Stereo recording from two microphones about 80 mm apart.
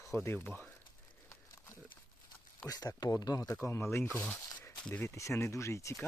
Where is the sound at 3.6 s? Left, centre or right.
Left.